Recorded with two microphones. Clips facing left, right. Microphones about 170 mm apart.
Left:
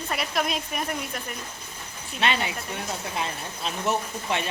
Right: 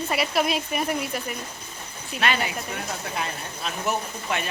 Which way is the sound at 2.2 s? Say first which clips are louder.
Right 1 dB; 25° left (ahead or behind).